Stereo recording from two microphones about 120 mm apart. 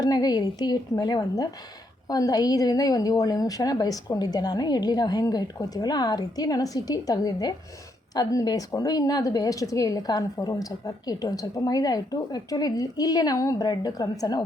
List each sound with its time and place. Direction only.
0.0 s a woman's voice: 35° left (ahead or behind)